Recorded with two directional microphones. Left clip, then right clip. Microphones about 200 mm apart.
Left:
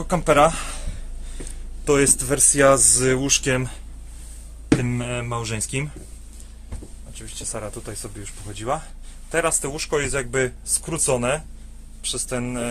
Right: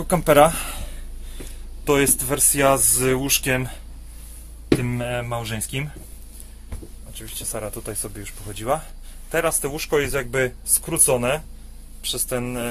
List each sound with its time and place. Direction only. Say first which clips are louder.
0.0 s speech: right 2 dB; 15° right (ahead or behind)
1.4 s speech: even; centre (ahead or behind)
4.8 s speech: right 1 dB; centre (ahead or behind)
7.2 s speech: right 1 dB; 10° right (ahead or behind)